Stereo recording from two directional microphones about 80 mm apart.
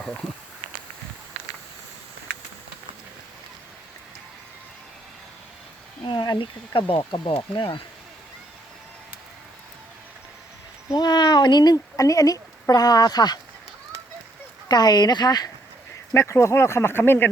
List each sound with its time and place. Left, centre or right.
0.0 s speech: centre
6.1 s speech: left
10.9 s speech: left
14.7 s speech: left
16.1 s speech: left